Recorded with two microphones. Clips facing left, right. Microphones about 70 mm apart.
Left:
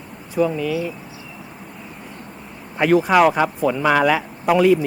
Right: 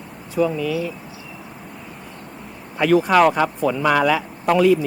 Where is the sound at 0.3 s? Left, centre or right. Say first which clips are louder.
Even; centre.